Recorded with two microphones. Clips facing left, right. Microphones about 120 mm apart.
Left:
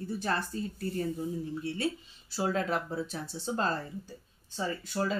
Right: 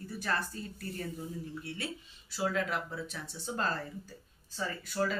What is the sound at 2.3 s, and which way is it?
Speech, 35° left (ahead or behind).